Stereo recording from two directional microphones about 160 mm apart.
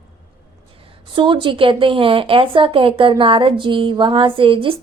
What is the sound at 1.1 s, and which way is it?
Speech, 30° right (ahead or behind).